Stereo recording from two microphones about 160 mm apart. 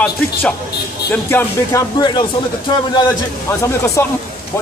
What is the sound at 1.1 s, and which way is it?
Speech, 15° left (ahead or behind).